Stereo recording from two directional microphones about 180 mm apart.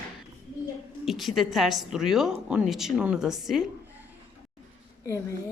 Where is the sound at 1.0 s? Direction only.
Centre (ahead or behind).